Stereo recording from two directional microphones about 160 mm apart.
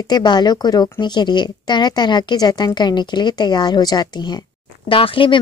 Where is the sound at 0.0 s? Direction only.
25° left (ahead or behind).